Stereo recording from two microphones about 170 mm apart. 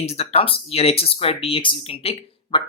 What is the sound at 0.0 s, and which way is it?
Speech, 40° left (ahead or behind).